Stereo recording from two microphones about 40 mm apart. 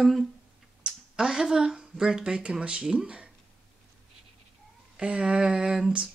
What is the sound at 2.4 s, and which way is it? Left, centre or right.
Speech, right.